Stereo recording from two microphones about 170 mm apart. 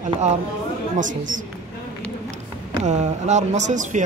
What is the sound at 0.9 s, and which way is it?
Speech, 50° right (ahead or behind).